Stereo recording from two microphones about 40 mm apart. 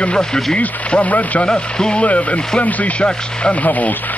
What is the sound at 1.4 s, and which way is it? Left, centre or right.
Speech, left.